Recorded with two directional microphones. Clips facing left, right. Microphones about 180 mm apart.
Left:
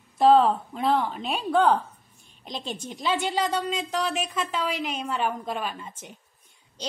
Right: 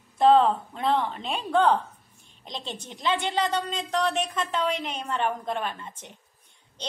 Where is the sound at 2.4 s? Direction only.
25° right (ahead or behind).